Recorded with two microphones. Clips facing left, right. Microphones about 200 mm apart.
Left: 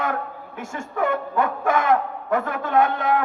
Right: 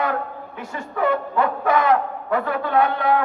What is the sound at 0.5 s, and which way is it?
A man's voice, 45° left (ahead or behind).